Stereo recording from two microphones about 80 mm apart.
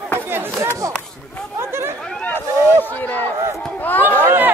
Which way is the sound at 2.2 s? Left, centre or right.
Left.